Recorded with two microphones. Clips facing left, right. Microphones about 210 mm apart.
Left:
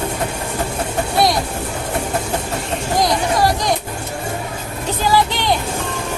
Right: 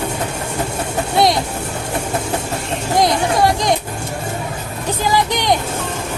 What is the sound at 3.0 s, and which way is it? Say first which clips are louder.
Music: right 2 dB; 20° right (ahead or behind).